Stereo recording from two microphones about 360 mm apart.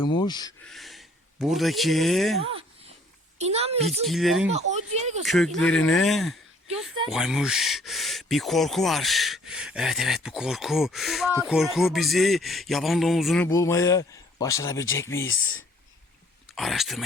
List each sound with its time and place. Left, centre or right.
0.0 s speech: centre
3.3 s speech: centre
4.0 s speech: centre
4.5 s speech: centre
5.2 s speech: centre
16.6 s speech: centre